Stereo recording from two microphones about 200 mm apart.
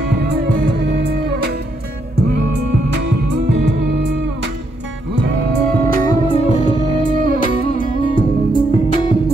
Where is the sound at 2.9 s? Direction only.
60° right (ahead or behind).